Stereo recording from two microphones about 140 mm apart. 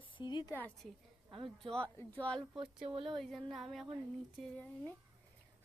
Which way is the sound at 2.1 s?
10° left (ahead or behind).